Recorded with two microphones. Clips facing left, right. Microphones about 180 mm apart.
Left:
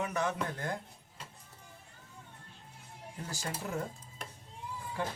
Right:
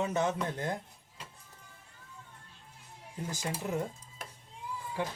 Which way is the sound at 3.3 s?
20° right (ahead or behind).